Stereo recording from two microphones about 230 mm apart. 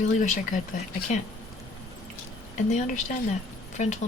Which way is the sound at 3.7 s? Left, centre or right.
Left.